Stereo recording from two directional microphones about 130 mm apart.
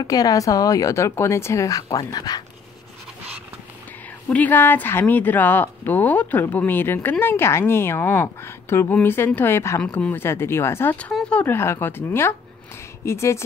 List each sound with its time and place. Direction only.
0.0 s speech: 30° left (ahead or behind)
4.3 s speech: 10° left (ahead or behind)